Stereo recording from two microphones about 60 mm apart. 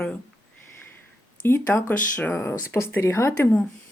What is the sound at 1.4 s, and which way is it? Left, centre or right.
Speech, left.